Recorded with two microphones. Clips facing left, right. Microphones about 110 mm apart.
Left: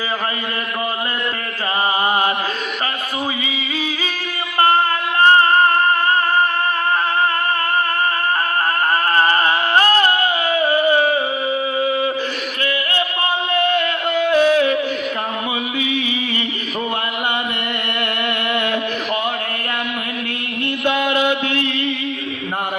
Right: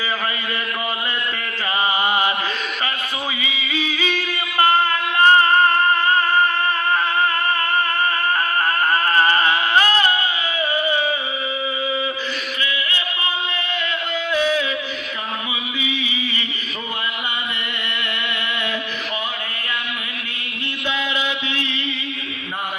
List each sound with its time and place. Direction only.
3.7 s music: 40° left (ahead or behind)
9.1 s a sound: 35° left (ahead or behind); by 12.1 s 55° left (ahead or behind)
12.6 s music: 50° left (ahead or behind)
15.8 s music: 55° left (ahead or behind)
20.8 s chant: 55° left (ahead or behind)